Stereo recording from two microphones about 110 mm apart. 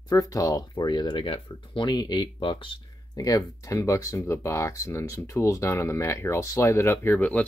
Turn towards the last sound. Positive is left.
turn(degrees=10)  # may be behind; listen again after turning